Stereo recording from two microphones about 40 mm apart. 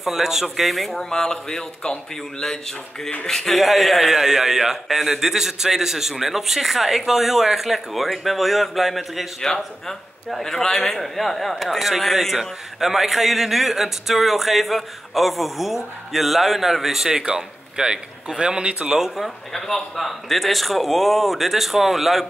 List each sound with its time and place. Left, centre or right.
0.0 s a man's voice: centre
0.9 s a man's voice: centre
3.5 s a man's voice: centre
9.8 s a man's voice: centre
17.1 s speech: right
18.4 s speech: right
18.9 s speech: centre
19.2 s a man's voice: centre